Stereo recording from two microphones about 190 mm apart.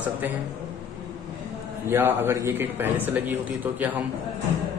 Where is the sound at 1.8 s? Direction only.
10° right (ahead or behind).